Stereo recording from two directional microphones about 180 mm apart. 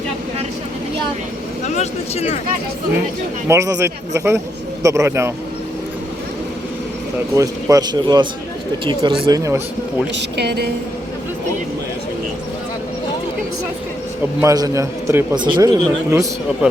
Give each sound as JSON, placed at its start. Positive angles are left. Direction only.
{"t": 1.6, "sound": "a sound", "side_deg": 40}
{"t": 3.5, "sound": "a man's voice", "side_deg": -15}
{"t": 7.3, "sound": "speech", "side_deg": -20}
{"t": 10.2, "sound": "a woman's voice", "side_deg": -65}
{"t": 14.4, "sound": "a man's voice", "side_deg": -20}